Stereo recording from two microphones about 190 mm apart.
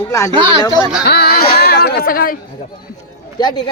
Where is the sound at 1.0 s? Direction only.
55° left (ahead or behind).